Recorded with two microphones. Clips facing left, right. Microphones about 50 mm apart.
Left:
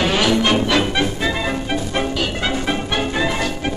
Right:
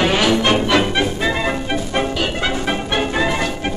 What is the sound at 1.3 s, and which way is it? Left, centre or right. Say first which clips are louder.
Music: right 2 dB; centre.